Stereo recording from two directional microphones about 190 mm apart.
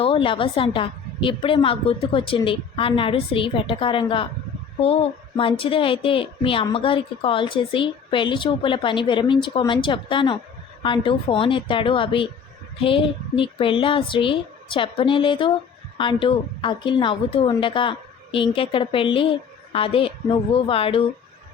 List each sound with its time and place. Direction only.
0.0 s a woman's voice: 25° left (ahead or behind)
5.4 s a woman's voice: 30° left (ahead or behind)